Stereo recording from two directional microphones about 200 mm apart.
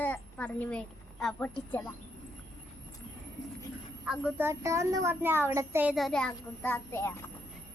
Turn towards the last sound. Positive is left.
turn(degrees=15)  # may be behind; listen again after turning